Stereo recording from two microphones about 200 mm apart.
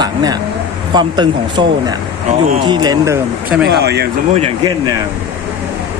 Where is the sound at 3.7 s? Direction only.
55° right (ahead or behind).